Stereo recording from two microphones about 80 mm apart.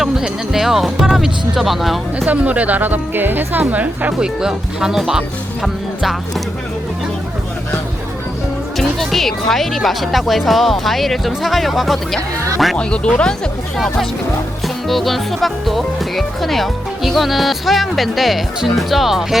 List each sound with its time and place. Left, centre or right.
0.0 s speech: centre
2.2 s a woman's voice: centre
4.4 s speech: centre
8.8 s speech: centre
12.7 s speech: centre